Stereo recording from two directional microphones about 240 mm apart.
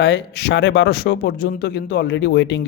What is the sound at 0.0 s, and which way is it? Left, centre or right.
Speech, left.